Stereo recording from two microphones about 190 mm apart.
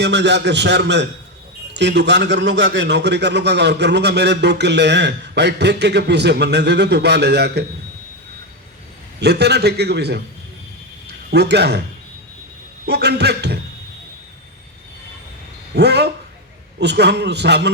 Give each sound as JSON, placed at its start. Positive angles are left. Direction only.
{"t": 0.0, "sound": "a man's voice", "side_deg": -65}
{"t": 9.2, "sound": "a man's voice", "side_deg": -60}
{"t": 11.0, "sound": "a sound", "side_deg": -60}
{"t": 12.8, "sound": "a man's voice", "side_deg": -60}
{"t": 15.7, "sound": "a man's voice", "side_deg": -60}